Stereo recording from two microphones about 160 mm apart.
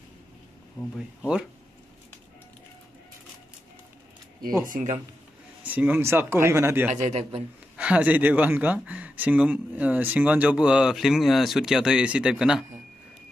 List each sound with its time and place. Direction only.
0.7 s speech: 5° right (ahead or behind)
4.6 s speech: 55° right (ahead or behind)
5.6 s speech: 10° right (ahead or behind)
6.9 s a man's voice: 45° right (ahead or behind)
7.7 s speech: 5° right (ahead or behind)